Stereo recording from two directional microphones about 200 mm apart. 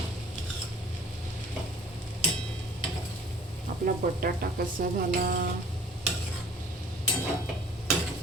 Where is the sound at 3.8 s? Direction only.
50° right (ahead or behind).